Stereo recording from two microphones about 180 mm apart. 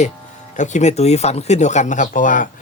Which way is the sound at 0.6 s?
40° left (ahead or behind).